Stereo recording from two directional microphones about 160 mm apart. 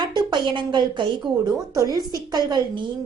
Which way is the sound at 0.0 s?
25° right (ahead or behind).